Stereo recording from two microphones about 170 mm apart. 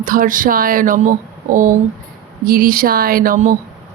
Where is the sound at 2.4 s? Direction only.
60° right (ahead or behind).